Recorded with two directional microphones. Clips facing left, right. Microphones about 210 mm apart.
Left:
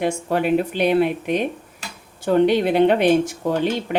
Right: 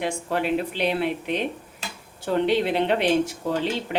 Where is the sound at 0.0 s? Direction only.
50° left (ahead or behind).